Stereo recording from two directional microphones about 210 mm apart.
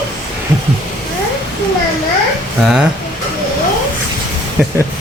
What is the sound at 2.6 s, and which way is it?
Speech, 5° right (ahead or behind).